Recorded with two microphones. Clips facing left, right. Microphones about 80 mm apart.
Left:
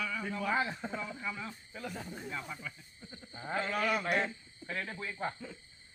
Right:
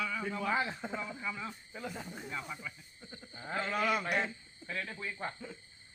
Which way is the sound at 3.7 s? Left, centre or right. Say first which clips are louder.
Right 1 dB; centre.